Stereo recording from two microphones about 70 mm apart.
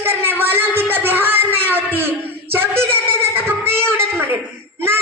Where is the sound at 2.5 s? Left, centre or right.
Right.